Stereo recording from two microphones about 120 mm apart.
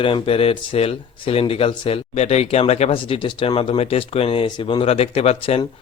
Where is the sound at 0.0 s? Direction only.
50° left (ahead or behind).